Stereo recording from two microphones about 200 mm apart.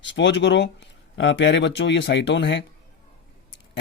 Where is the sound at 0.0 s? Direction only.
65° left (ahead or behind).